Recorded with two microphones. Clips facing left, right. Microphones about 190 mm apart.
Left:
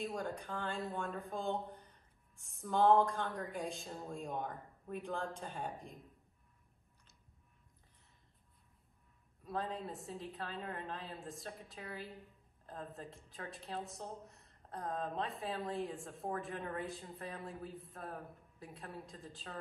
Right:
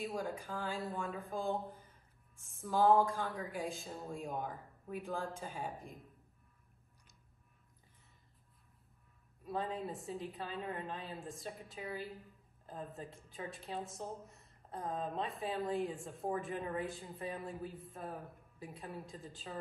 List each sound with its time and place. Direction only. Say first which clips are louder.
0.0 s a woman's voice: right 1 dB; centre (ahead or behind)
9.4 s a woman's voice: right 2 dB; centre (ahead or behind)